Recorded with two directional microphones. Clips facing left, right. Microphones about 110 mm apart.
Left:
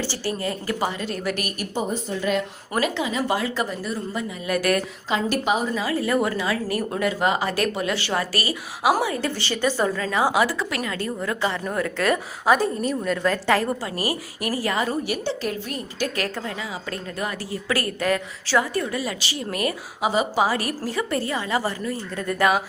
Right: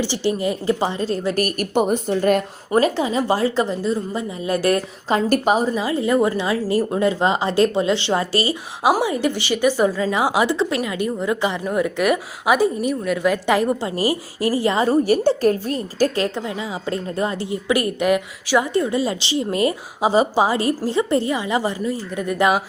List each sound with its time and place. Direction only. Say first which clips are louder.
0.0 s a woman's voice: right 6 dB; 20° right (ahead or behind)
1.4 s a woman's voice: right 9 dB; 45° right (ahead or behind)
1.7 s a woman's voice: right 8 dB; 65° right (ahead or behind)
2.7 s a woman's voice: right 6 dB; 35° right (ahead or behind)
5.0 s a woman's voice: right 6 dB; 45° right (ahead or behind)
5.7 s a woman's voice: right 4 dB; 25° right (ahead or behind)
15.0 s a woman's voice: right 10 dB; 45° right (ahead or behind)
16.9 s a woman's voice: right 8 dB; 25° right (ahead or behind)